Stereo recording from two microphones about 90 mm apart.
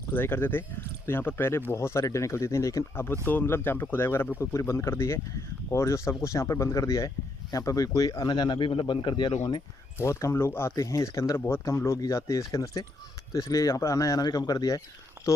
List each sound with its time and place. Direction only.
0.1 s speech: 25° left (ahead or behind)
3.1 s speech: 25° left (ahead or behind); by 9.6 s 60° left (ahead or behind)
9.9 s speech: 30° left (ahead or behind)
15.2 s a sound: 35° right (ahead or behind)